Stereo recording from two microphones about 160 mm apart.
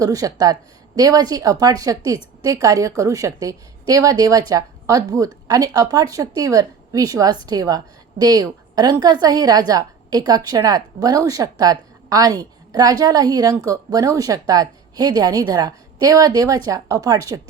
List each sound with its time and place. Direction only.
0.0 s a woman's voice: 20° right (ahead or behind)